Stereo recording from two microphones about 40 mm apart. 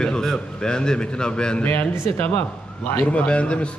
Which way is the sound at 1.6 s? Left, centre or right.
Left.